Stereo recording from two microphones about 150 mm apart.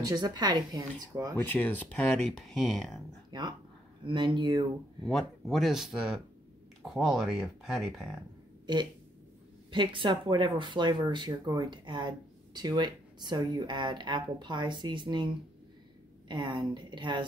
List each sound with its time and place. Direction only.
0.0 s a woman's voice: 30° right (ahead or behind)
1.4 s speech: 10° left (ahead or behind)
3.3 s speech: 30° right (ahead or behind)
5.0 s speech: centre (ahead or behind)
9.7 s speech: 35° right (ahead or behind)